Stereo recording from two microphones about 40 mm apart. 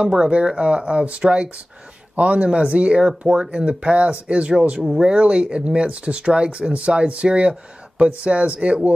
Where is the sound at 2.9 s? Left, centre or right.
Centre.